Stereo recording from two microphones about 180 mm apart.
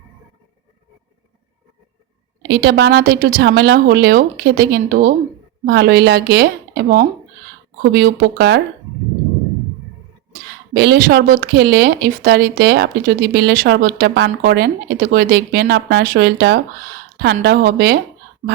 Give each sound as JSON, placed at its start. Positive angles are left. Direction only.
{"t": 2.4, "sound": "speech", "side_deg": -65}
{"t": 5.6, "sound": "speech", "side_deg": -65}
{"t": 10.8, "sound": "speech", "side_deg": -65}
{"t": 18.4, "sound": "speech", "side_deg": -75}